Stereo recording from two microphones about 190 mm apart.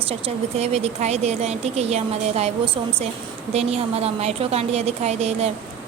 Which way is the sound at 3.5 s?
35° right (ahead or behind).